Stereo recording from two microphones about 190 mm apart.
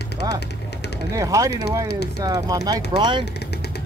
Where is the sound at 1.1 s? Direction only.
15° right (ahead or behind).